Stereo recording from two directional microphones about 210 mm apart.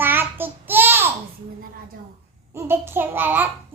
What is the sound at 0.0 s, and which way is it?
Child singing, 10° right (ahead or behind).